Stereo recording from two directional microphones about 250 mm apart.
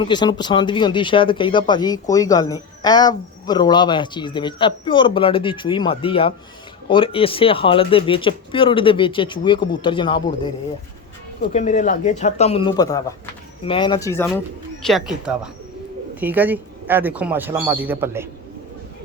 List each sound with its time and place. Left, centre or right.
0.0 s speech: centre
11.4 s speech: left; by 18.3 s centre